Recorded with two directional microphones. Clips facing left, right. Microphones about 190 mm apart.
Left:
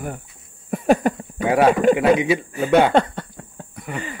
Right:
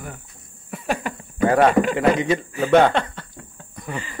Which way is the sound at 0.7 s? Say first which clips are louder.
Left 9 dB; 45° left (ahead or behind).